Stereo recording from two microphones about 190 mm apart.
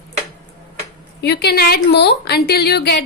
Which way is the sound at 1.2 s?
60° left (ahead or behind).